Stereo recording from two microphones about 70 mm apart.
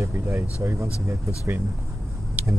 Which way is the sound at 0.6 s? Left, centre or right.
Right.